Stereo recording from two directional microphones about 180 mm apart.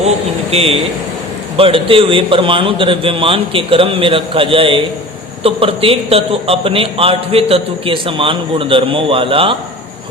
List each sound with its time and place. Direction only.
0.5 s a man's voice: 35° right (ahead or behind)